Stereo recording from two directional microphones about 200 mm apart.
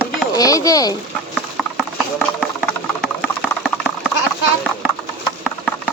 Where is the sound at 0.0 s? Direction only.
15° left (ahead or behind).